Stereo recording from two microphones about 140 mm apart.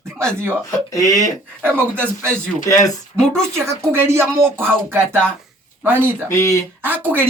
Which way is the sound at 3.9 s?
20° right (ahead or behind).